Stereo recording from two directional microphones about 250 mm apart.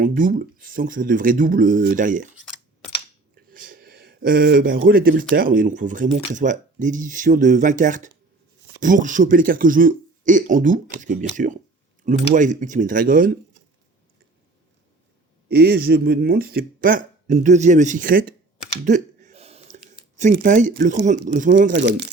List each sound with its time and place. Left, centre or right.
0.0 s speech: right
3.5 s speech: right
15.4 s speech: right
18.9 s a sound: right
20.1 s speech: right